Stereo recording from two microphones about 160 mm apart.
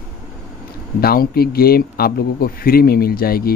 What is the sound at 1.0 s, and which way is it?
A man's voice, 70° left (ahead or behind).